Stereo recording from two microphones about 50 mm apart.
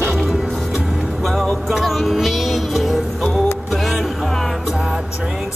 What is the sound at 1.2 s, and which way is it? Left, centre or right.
Music, centre.